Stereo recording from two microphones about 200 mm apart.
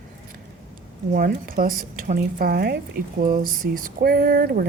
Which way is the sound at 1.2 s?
45° right (ahead or behind).